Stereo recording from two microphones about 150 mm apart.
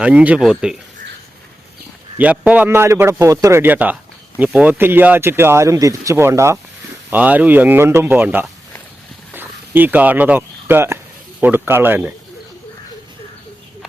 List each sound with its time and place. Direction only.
0.0 s speech: 10° right (ahead or behind)
2.1 s speech: 10° right (ahead or behind)